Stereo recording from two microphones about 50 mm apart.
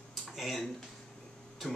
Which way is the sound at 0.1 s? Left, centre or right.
Centre.